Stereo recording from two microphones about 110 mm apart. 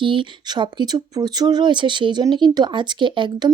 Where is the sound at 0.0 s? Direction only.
50° right (ahead or behind).